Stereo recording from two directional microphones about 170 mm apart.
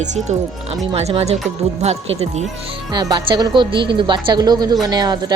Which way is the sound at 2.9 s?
25° right (ahead or behind).